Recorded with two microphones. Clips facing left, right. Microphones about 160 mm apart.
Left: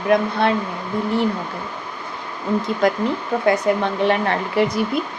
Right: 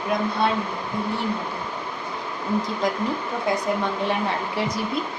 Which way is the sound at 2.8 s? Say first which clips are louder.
Left 5 dB; 65° left (ahead or behind).